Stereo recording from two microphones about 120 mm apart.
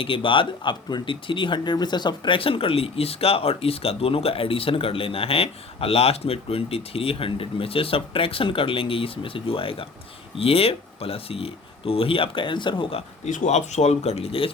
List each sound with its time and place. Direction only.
0.0 s speech: 45° left (ahead or behind)
13.2 s speech: 80° left; by 14.5 s 55° left (ahead or behind)